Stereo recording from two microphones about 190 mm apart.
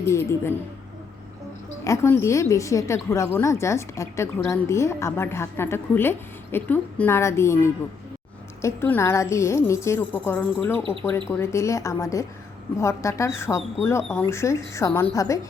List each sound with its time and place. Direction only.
0.1 s a woman's voice: 15° left (ahead or behind)
1.8 s a woman's voice: 15° left (ahead or behind)